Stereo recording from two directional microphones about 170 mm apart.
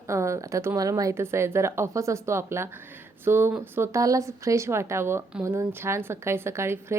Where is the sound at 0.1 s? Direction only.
15° right (ahead or behind).